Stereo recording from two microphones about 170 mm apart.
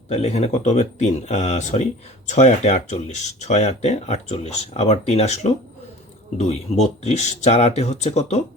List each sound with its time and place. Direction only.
0.1 s speech: 40° left (ahead or behind)